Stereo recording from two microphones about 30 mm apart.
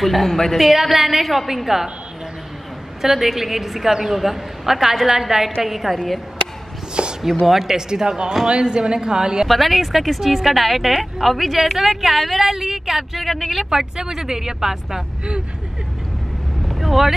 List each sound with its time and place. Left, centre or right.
0.0 s a woman's voice: centre
0.7 s speech: centre
1.7 s a woman's voice: centre
3.0 s a woman's voice: centre
5.9 s speech: centre
7.0 s chopping: right
7.4 s a woman's voice: centre
7.7 s a woman's voice: right
9.5 s speech: centre
13.7 s a woman's voice: right
16.6 s vehicle: centre